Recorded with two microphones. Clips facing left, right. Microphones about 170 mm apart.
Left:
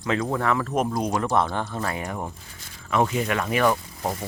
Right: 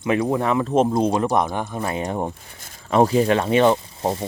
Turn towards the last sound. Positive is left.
turn(degrees=-25)  # may be behind; listen again after turning